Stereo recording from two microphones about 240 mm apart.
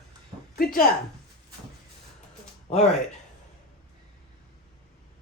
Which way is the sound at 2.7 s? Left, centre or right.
Left.